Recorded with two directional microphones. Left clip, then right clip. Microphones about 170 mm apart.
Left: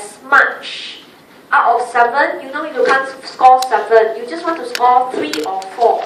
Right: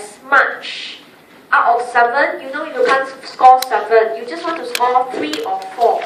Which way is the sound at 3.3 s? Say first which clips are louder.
Even; 10° right (ahead or behind).